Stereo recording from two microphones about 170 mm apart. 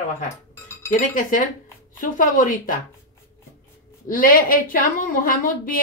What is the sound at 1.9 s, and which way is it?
Speech, 50° left (ahead or behind).